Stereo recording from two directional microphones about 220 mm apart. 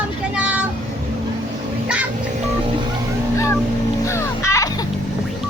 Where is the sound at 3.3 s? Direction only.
10° left (ahead or behind).